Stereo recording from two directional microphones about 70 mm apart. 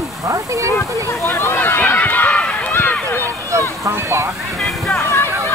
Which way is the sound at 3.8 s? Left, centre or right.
Right.